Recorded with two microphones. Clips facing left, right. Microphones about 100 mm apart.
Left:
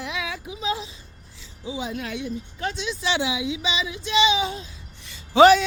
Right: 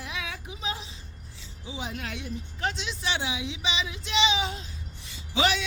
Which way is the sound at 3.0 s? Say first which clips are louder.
Left 6 dB; 90° left.